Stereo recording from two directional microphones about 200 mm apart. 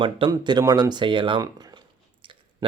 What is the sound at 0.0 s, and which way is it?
A man's voice, 25° right (ahead or behind).